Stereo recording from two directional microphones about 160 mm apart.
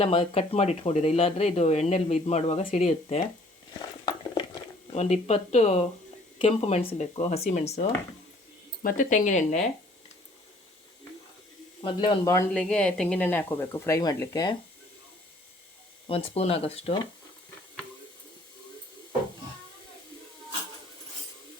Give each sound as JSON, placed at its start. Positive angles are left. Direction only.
{"t": 0.0, "sound": "speech", "side_deg": 40}
{"t": 3.8, "sound": "biting", "side_deg": 30}
{"t": 4.9, "sound": "speech", "side_deg": 45}
{"t": 8.8, "sound": "speech", "side_deg": 55}
{"t": 11.8, "sound": "speech", "side_deg": 30}
{"t": 12.2, "sound": "speech", "side_deg": 20}
{"t": 12.5, "sound": "speech", "side_deg": 5}
{"t": 16.0, "sound": "speech", "side_deg": 35}